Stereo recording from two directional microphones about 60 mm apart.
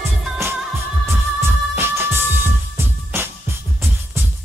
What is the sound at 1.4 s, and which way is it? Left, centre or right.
Music, right.